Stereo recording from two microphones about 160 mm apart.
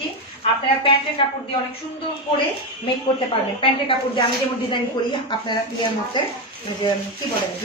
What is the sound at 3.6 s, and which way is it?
A woman's voice, 35° left (ahead or behind).